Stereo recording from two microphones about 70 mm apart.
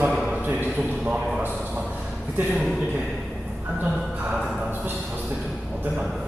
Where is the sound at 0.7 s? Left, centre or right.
Centre.